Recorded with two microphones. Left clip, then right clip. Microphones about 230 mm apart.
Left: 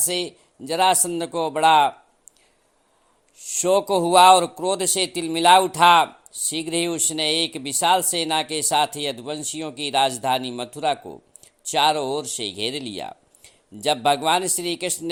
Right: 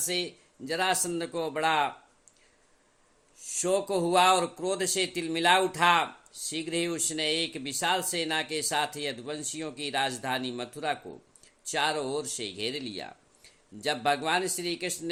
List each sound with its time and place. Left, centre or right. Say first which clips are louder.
0.0 s a man's voice: left 6 dB; left
3.4 s a man's voice: left 8 dB; left